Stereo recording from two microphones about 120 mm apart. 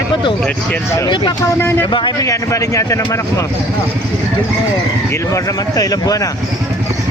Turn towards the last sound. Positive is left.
turn(degrees=30)  # may be behind; listen again after turning